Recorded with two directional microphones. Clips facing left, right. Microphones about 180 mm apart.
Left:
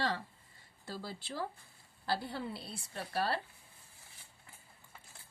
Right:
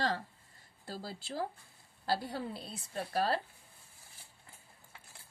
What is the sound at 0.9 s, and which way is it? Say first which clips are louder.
A woman's voice: right 1 dB; 40° right (ahead or behind).